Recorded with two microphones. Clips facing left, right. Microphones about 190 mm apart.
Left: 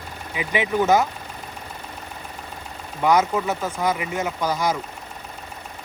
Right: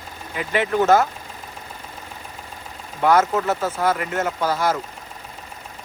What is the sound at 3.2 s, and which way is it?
Speech, 5° right (ahead or behind).